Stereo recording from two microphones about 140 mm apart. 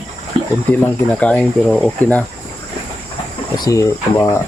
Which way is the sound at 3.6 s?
25° left (ahead or behind).